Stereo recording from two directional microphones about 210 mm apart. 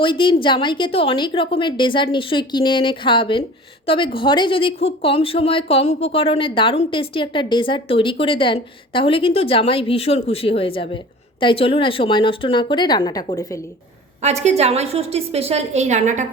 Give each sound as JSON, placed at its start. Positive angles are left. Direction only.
{"t": 0.0, "sound": "speech", "side_deg": 25}
{"t": 14.2, "sound": "a woman's voice", "side_deg": -30}